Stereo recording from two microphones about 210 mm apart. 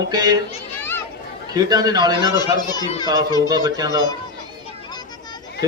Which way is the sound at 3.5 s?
20° right (ahead or behind).